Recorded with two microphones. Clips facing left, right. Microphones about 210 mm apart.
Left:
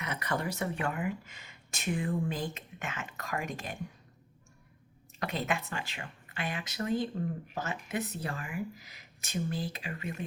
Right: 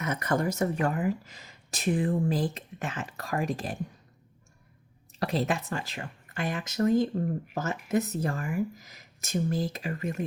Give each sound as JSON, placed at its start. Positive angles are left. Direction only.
{"t": 0.0, "sound": "speech", "side_deg": -45}
{"t": 5.2, "sound": "speech", "side_deg": -35}